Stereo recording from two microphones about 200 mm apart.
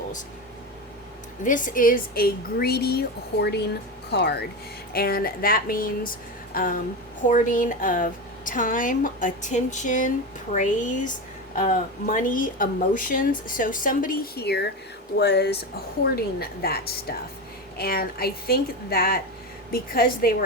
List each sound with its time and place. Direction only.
1.5 s speech: 40° left (ahead or behind)